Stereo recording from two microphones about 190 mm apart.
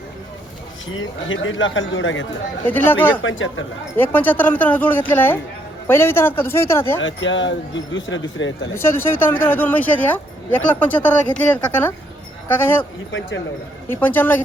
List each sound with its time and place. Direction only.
0.9 s speech: 90° left
2.6 s speech: 10° left (ahead or behind)
3.2 s speech: 90° left
3.9 s speech: 10° left (ahead or behind)
7.0 s speech: 80° left
8.7 s speech: 15° left (ahead or behind)
13.8 s speech: 10° left (ahead or behind)